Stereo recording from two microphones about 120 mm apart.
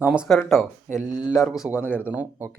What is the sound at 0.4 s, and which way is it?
Speech, 5° left (ahead or behind).